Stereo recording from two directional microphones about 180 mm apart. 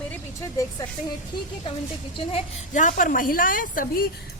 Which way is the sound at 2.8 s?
45° left (ahead or behind).